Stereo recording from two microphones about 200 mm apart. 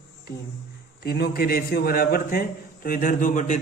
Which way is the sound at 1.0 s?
50° left (ahead or behind).